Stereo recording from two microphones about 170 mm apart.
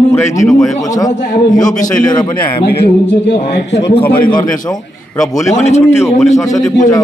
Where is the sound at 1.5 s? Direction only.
50° left (ahead or behind).